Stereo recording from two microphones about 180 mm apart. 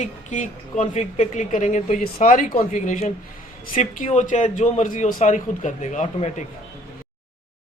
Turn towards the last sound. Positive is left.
turn(degrees=40)  # may be behind; listen again after turning